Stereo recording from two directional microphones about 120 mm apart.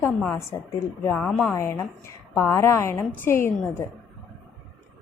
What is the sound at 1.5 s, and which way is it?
A woman's voice, 20° left (ahead or behind).